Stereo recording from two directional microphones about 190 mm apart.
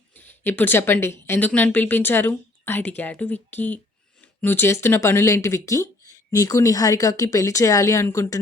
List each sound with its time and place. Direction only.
0.1 s speech: 10° left (ahead or behind)